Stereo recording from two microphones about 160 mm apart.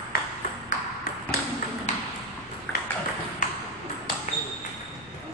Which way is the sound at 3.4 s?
55° left (ahead or behind).